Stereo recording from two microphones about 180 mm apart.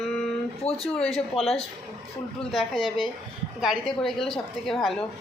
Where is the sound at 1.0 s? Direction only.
Centre (ahead or behind).